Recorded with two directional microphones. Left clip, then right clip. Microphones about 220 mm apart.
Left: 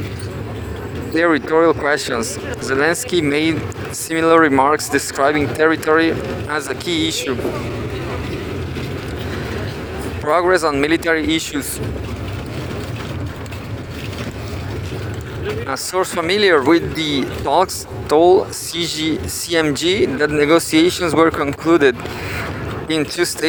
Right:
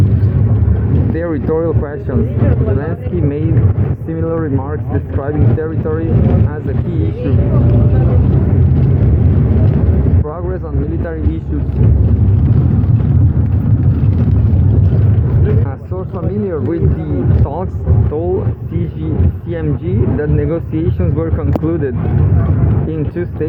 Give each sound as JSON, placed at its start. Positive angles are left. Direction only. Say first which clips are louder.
{"t": 1.2, "sound": "speech", "louder": "left 4 dB", "side_deg": 65}
{"t": 10.2, "sound": "speech", "louder": "left 9 dB", "side_deg": 85}
{"t": 16.3, "sound": "speech", "louder": "left 7 dB", "side_deg": 65}
{"t": 18.1, "sound": "speech", "louder": "left 8 dB", "side_deg": 60}
{"t": 20.4, "sound": "speech", "louder": "left 6 dB", "side_deg": 55}